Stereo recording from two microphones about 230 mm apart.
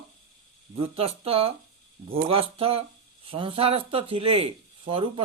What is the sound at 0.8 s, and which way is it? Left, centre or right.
Speech, right.